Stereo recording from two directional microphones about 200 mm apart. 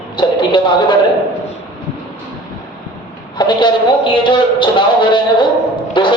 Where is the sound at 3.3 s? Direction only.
25° left (ahead or behind).